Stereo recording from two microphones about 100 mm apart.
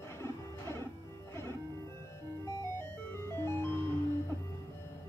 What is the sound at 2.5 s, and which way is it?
Ice cream truck, 25° left (ahead or behind).